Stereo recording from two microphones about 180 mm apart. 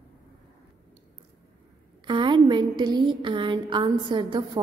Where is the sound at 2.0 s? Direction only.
25° right (ahead or behind).